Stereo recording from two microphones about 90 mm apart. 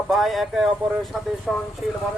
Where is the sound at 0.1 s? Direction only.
Centre (ahead or behind).